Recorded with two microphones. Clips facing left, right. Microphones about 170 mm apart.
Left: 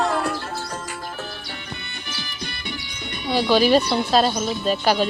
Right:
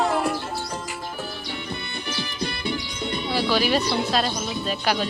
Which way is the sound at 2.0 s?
30° right (ahead or behind).